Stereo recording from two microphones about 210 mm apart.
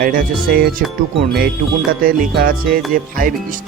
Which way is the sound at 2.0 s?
45° right (ahead or behind).